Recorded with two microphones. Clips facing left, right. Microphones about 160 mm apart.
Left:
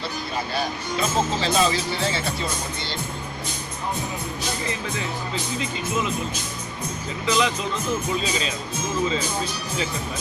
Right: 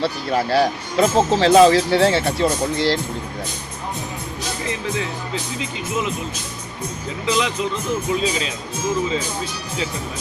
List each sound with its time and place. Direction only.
0.0 s speech: 90° right
7.3 s speech: 15° right (ahead or behind)